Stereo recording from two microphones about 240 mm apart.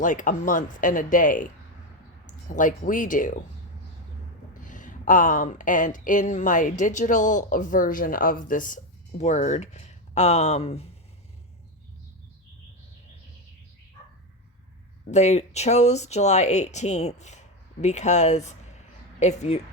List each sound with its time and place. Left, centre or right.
0.0 s speech: left
4.6 s speech: left
15.1 s speech: left